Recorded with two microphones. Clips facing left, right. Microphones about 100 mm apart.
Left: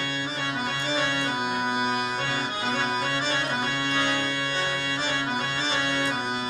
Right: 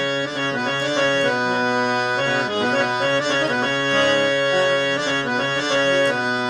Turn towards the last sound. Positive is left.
turn(degrees=-60)  # may be behind; listen again after turning